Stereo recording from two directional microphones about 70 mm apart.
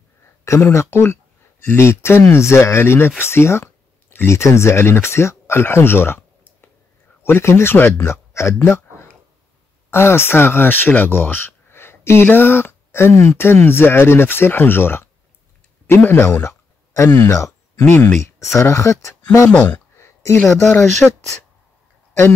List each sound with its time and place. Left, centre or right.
0.5 s speech: left
8.6 s a sound: left
9.8 s speech: left
17.8 s speech: left
19.5 s speech: centre
20.0 s a sound: left
21.0 s speech: centre